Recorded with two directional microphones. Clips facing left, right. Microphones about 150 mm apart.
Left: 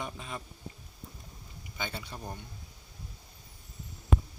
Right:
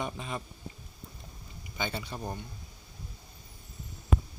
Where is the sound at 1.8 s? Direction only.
15° right (ahead or behind).